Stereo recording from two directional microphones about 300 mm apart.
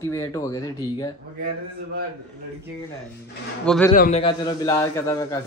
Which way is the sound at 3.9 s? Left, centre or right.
Left.